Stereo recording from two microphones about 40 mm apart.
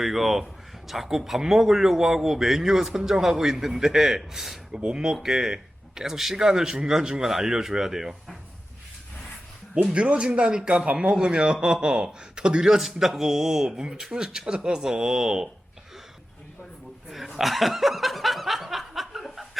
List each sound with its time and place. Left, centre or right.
0.0 s a man's voice: centre
4.7 s a man's voice: right
9.9 s a man's voice: right; by 13.7 s centre
13.7 s a man's voice: centre
17.1 s snicker: centre